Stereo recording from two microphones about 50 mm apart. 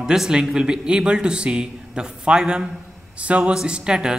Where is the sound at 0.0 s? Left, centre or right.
Centre.